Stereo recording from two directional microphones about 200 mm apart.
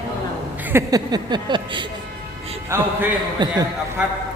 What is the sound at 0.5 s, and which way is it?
Speech, 10° right (ahead or behind).